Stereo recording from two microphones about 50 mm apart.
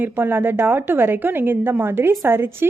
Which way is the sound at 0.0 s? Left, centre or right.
Right.